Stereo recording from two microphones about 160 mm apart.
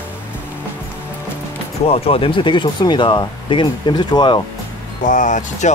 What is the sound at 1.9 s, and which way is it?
Speech, 35° left (ahead or behind).